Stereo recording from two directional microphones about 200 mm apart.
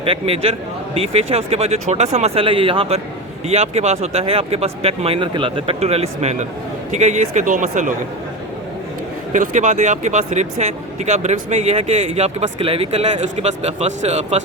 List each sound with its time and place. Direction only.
0.0 s speech: 30° right (ahead or behind)
9.3 s speech: 40° right (ahead or behind)